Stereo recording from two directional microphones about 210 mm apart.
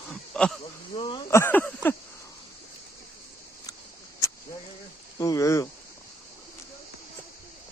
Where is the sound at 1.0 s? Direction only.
25° left (ahead or behind).